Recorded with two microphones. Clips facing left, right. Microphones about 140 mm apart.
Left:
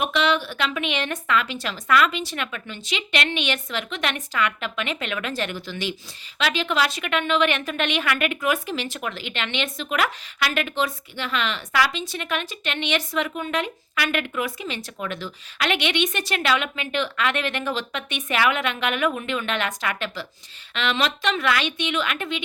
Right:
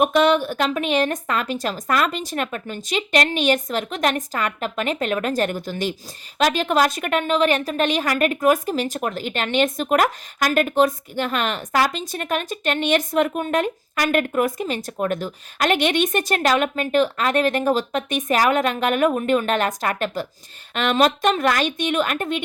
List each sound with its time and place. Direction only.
0.0 s a woman's voice: 45° right (ahead or behind)